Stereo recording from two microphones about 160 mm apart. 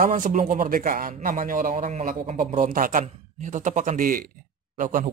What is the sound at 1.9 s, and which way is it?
Speech, 45° right (ahead or behind).